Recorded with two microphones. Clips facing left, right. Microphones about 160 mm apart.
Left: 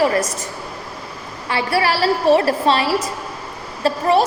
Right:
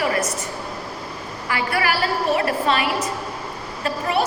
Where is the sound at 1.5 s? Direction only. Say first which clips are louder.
Left 4 dB; 30° left (ahead or behind).